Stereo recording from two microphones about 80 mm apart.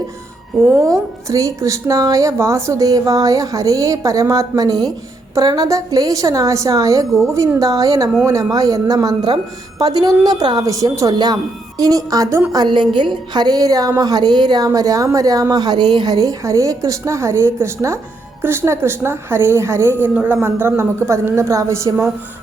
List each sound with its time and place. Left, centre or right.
0.6 s speech: right
8.1 s speech: right
11.1 s a woman's voice: right
11.8 s speech: right
12.5 s a woman's voice: right
20.1 s a woman's voice: right